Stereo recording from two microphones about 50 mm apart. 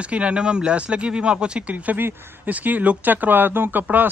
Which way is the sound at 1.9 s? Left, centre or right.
Right.